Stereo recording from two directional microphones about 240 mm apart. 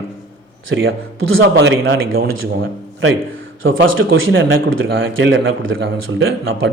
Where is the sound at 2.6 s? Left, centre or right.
Right.